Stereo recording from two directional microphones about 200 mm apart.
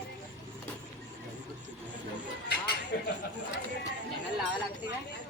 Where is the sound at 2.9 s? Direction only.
50° left (ahead or behind).